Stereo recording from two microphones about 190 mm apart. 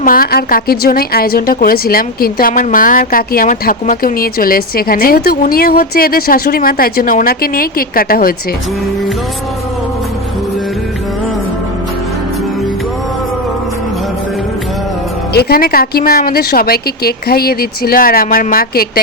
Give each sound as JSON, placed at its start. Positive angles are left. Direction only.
{"t": 0.0, "sound": "a woman's voice", "side_deg": 50}
{"t": 15.3, "sound": "a woman's voice", "side_deg": 55}